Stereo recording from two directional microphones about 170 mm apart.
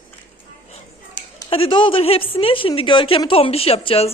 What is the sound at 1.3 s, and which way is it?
A woman's voice, 30° left (ahead or behind).